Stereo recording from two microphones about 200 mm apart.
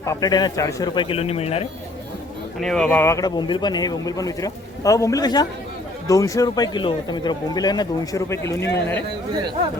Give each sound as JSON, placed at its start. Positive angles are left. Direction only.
{"t": 0.0, "sound": "speech", "side_deg": 15}
{"t": 2.6, "sound": "speech", "side_deg": 5}